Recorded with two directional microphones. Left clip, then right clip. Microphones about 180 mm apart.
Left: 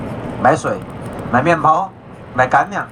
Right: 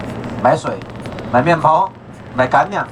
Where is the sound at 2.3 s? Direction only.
20° left (ahead or behind).